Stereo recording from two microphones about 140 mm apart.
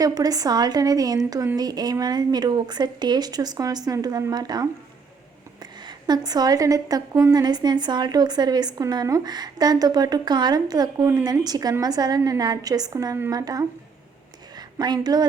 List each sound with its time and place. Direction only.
0.0 s a woman's voice: 25° right (ahead or behind)
5.8 s a woman's voice: 30° right (ahead or behind)